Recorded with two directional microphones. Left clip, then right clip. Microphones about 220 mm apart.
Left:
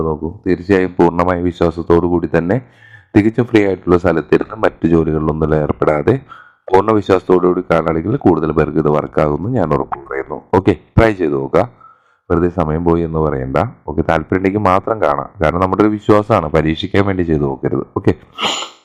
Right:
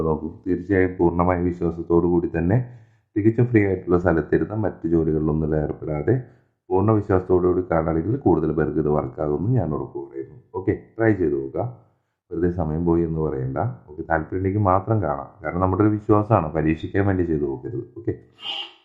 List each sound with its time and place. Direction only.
0.0 s a man's voice: 30° left (ahead or behind)